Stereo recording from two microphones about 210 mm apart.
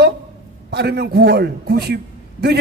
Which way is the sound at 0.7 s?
50° right (ahead or behind).